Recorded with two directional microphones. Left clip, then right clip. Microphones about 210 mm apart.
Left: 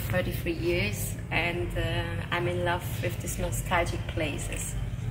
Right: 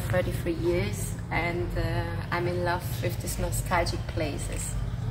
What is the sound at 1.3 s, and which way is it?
Speech, 15° left (ahead or behind).